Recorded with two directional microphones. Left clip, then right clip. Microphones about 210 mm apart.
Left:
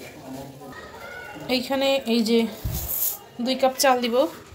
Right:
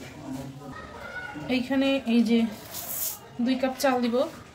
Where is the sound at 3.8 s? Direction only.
35° left (ahead or behind).